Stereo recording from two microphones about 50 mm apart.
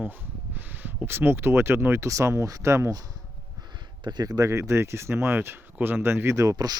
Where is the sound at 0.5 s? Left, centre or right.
Right.